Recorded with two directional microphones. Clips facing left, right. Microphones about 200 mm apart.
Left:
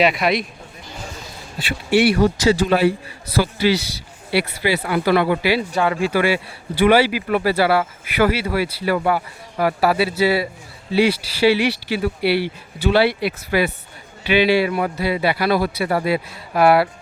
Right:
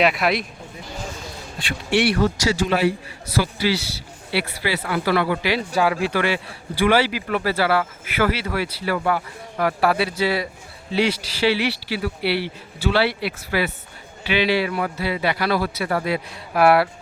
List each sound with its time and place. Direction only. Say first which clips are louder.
0.0 s a man's voice: left 2 dB; centre (ahead or behind)
1.5 s a man's voice: left 4 dB; 5° left (ahead or behind)
2.5 s speech: left 5 dB; 35° left (ahead or behind)
3.3 s speech: left 4 dB; 20° left (ahead or behind)
5.4 s speech: left 4 dB; 5° left (ahead or behind)
5.7 s a man's voice: left 1 dB; 5° right (ahead or behind)
6.1 s speech: left 4 dB; 10° left (ahead or behind)